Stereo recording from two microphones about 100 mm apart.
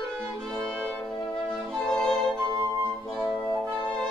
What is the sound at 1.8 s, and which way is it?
Music, 5° left (ahead or behind).